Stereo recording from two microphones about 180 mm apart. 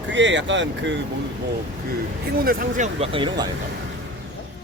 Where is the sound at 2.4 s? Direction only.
50° right (ahead or behind).